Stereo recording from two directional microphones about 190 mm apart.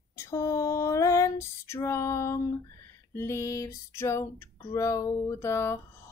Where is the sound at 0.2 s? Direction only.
15° left (ahead or behind).